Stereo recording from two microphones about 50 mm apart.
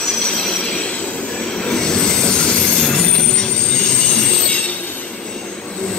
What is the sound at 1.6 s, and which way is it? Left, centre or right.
Train, centre.